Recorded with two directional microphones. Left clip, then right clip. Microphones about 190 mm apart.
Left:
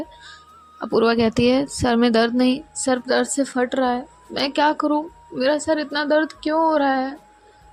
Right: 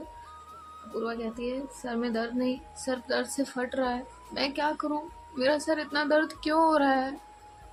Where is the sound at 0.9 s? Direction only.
45° left (ahead or behind); by 7.2 s 20° left (ahead or behind).